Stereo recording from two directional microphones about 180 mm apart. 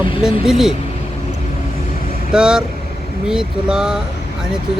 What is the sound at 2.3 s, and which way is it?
Speech, 5° right (ahead or behind).